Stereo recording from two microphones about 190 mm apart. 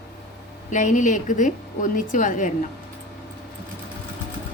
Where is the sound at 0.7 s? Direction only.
40° left (ahead or behind).